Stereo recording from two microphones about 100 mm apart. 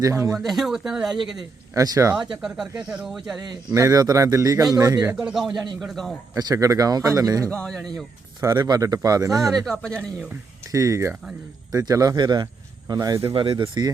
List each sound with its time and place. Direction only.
0.0 s speech: 30° right (ahead or behind)
0.3 s speech: centre (ahead or behind)
1.7 s speech: 35° right (ahead or behind)
2.4 s speech: 5° right (ahead or behind)
3.8 s speech: 40° right (ahead or behind)
5.2 s speech: 5° right (ahead or behind)
6.4 s speech: 35° right (ahead or behind)
7.5 s speech: 5° left (ahead or behind)
8.5 s speech: 45° right (ahead or behind)
9.5 s speech: centre (ahead or behind)
10.7 s speech: 35° right (ahead or behind)
13.3 s speech: 60° right (ahead or behind)